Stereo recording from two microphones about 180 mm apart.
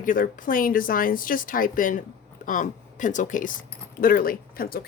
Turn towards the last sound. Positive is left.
turn(degrees=55)  # may be behind; listen again after turning